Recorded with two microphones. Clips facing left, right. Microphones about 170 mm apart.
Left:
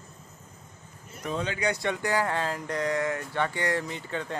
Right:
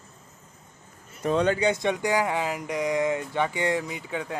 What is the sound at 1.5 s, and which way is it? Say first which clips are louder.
Speech: right 4 dB; 20° right (ahead or behind).